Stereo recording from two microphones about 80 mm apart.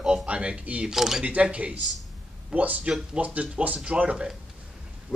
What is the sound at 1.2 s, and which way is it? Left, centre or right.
Speech, centre.